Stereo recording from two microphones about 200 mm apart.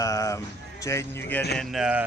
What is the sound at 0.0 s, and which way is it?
Speech, 15° left (ahead or behind).